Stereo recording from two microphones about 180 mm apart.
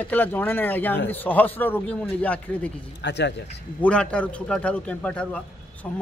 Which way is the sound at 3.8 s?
5° left (ahead or behind).